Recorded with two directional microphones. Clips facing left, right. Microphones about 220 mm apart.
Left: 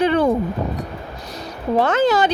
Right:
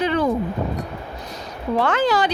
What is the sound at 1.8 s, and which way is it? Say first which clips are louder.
Speech: left 3 dB; 20° left (ahead or behind).